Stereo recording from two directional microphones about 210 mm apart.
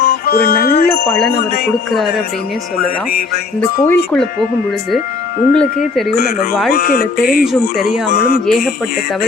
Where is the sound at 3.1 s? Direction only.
45° left (ahead or behind).